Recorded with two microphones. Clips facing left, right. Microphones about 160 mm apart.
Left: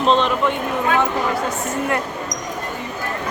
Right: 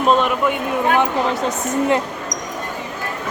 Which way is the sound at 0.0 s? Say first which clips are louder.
Right 1 dB; 10° right (ahead or behind).